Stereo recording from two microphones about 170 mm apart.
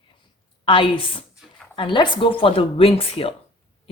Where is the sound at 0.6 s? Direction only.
30° left (ahead or behind).